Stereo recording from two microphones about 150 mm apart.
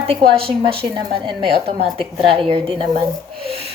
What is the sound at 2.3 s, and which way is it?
Speech, 40° right (ahead or behind).